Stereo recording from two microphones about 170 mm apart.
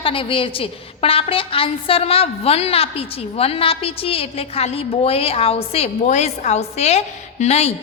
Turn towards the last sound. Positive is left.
turn(degrees=40)  # may be behind; listen again after turning